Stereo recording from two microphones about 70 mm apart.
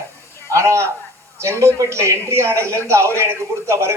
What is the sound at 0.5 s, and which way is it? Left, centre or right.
A man's voice, right.